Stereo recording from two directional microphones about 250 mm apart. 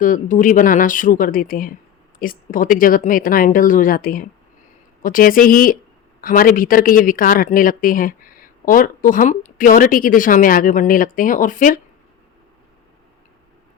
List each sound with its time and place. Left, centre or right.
0.0 s speech: left